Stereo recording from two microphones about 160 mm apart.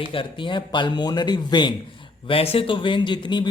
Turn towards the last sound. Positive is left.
turn(degrees=30)  # may be behind; listen again after turning